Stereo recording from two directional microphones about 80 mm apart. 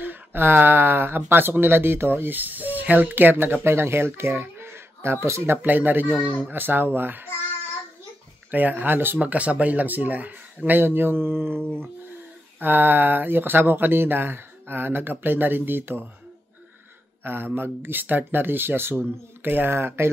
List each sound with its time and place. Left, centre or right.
0.0 s speech: right
8.5 s speech: right
17.2 s speech: right